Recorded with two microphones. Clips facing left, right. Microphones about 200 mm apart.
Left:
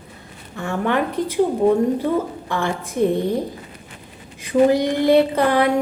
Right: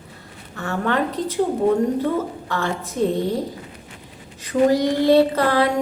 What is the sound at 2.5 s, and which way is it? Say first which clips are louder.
Speech: left 2 dB; 15° left (ahead or behind).